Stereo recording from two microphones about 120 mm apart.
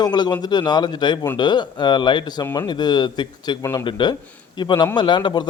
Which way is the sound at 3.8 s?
40° left (ahead or behind).